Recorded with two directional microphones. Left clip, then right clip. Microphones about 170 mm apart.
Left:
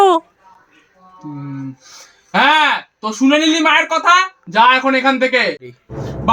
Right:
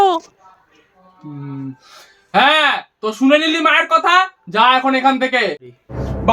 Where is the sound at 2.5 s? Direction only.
15° right (ahead or behind).